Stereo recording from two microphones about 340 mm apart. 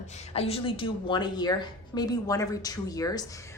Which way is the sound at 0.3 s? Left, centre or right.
Centre.